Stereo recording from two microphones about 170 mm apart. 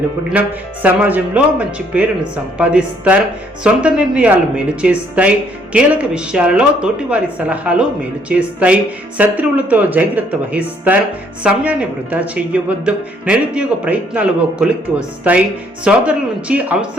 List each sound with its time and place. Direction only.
0.3 s speech: 5° right (ahead or behind)